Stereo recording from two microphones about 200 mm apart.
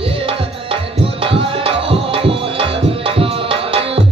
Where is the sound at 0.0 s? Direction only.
25° right (ahead or behind).